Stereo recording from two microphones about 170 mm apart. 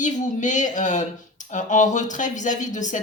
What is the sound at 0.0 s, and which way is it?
Speech, 45° left (ahead or behind).